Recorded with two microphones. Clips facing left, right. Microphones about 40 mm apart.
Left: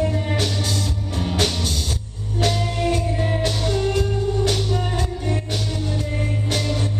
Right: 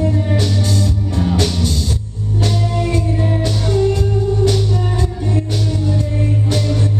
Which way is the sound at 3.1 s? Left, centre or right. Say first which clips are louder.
Right 4 dB; centre.